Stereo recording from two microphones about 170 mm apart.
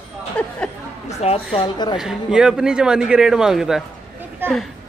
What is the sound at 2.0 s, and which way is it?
A man's voice, 5° right (ahead or behind).